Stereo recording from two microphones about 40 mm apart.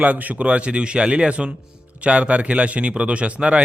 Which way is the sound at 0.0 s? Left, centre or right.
Right.